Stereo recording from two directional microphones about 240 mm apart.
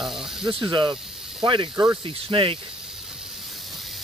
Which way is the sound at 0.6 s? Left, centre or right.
Centre.